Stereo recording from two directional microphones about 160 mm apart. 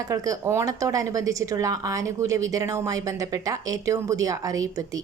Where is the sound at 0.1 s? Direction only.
20° right (ahead or behind).